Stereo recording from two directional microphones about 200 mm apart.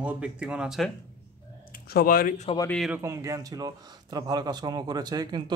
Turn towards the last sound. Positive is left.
turn(degrees=-20)  # may be behind; listen again after turning